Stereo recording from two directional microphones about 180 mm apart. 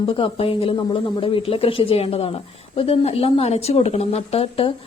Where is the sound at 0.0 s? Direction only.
30° left (ahead or behind).